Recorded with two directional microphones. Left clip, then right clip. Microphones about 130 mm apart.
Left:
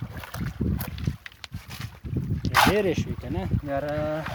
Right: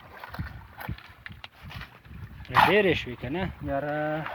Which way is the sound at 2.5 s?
45° left (ahead or behind).